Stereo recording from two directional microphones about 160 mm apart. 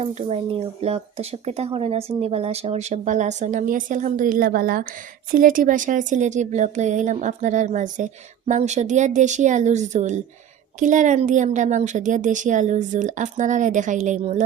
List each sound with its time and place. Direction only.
0.0 s speech: 40° right (ahead or behind)